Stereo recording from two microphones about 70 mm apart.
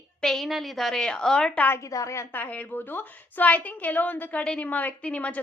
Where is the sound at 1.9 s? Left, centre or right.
Left.